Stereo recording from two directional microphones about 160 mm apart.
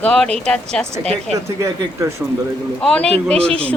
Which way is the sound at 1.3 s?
20° right (ahead or behind).